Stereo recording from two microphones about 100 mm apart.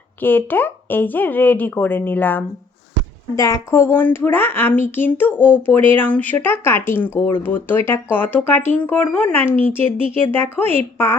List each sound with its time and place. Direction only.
0.2 s a woman's voice: 20° left (ahead or behind)
3.3 s a woman's voice: 30° left (ahead or behind)